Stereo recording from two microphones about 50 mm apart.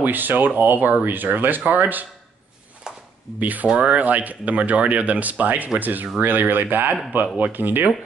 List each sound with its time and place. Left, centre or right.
0.0 s speech: right
2.9 s a sound: centre
3.3 s speech: right